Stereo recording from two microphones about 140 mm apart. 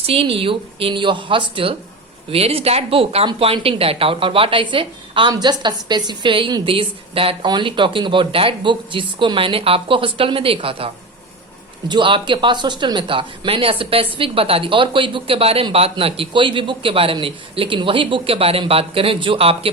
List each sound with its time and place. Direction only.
0.0 s speech: 40° right (ahead or behind)